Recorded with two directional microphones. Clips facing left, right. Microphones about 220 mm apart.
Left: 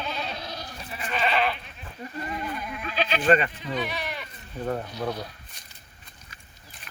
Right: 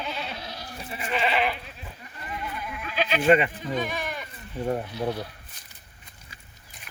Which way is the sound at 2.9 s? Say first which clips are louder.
Right 2 dB; 10° right (ahead or behind).